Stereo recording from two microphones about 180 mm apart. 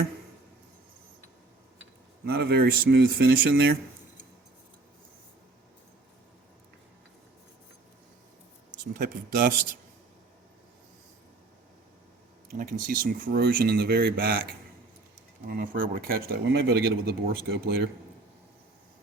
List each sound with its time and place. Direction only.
2.2 s speech: 60° right (ahead or behind)
8.8 s speech: 50° right (ahead or behind)
12.5 s speech: 50° right (ahead or behind)
15.4 s speech: 50° right (ahead or behind)